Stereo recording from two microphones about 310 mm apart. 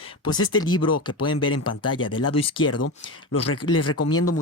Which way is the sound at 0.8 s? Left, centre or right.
Left.